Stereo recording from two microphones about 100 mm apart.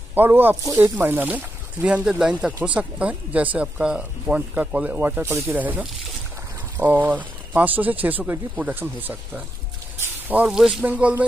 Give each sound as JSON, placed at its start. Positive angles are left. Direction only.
{"t": 0.1, "sound": "speech", "side_deg": -20}
{"t": 9.9, "sound": "a sound", "side_deg": -15}
{"t": 10.8, "sound": "speech", "side_deg": -15}